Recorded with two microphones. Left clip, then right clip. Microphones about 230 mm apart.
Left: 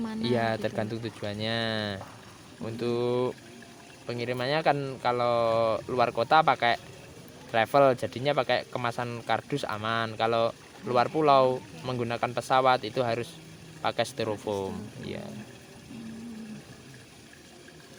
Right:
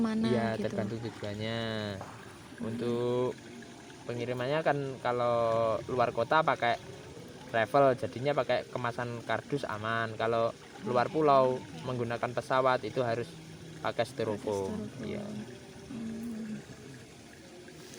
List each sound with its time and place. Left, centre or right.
0.2 s speech: left
2.8 s speech: left